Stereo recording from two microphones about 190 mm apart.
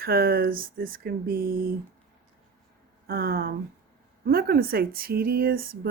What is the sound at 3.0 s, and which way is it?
Speech, 55° right (ahead or behind).